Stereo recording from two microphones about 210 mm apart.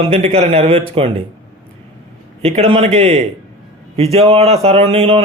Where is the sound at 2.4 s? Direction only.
30° right (ahead or behind).